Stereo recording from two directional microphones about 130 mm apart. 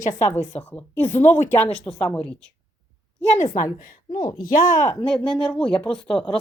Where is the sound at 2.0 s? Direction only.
15° left (ahead or behind).